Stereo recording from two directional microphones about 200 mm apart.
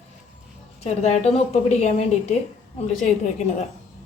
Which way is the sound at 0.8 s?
35° left (ahead or behind).